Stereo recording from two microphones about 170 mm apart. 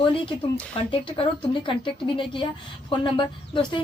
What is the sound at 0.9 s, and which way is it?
A woman's voice, 30° left (ahead or behind).